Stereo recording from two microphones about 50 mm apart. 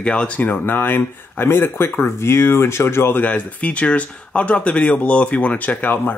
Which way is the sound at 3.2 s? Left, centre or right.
Left.